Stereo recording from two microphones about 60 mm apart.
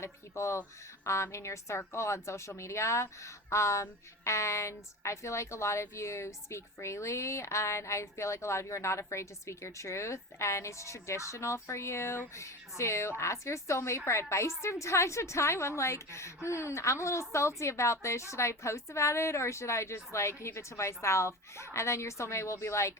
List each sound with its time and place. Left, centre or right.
0.0 s a woman's voice: left